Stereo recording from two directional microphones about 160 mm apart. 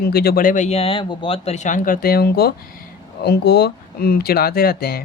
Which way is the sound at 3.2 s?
90° left.